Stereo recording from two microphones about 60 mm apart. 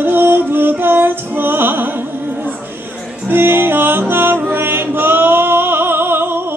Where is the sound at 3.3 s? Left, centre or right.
Right.